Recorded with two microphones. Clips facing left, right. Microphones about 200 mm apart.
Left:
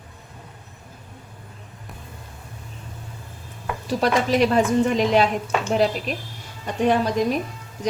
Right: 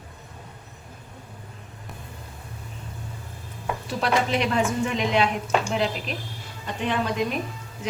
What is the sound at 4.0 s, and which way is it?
A woman's voice, 40° left (ahead or behind).